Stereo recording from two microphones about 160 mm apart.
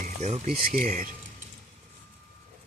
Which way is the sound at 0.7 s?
55° right (ahead or behind).